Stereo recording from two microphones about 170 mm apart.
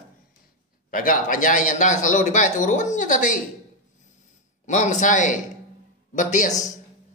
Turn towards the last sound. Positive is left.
turn(degrees=45)  # may be behind; listen again after turning